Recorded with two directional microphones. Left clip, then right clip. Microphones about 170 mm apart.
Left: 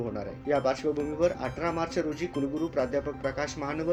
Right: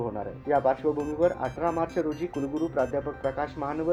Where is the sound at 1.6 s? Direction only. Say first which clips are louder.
Right 2 dB; 10° left (ahead or behind).